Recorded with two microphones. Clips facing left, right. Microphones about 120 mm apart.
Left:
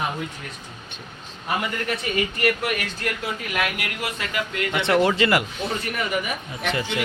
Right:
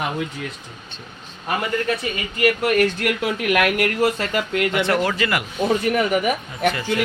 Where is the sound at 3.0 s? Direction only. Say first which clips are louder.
Right 6 dB; 70° right (ahead or behind).